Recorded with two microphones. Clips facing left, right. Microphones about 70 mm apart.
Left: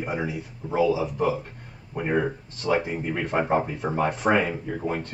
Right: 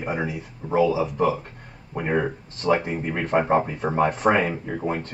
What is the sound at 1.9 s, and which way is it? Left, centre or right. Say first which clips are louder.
A man's voice: right 1 dB; centre.